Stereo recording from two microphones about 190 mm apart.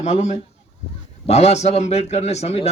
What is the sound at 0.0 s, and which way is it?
A man's voice, 35° left (ahead or behind).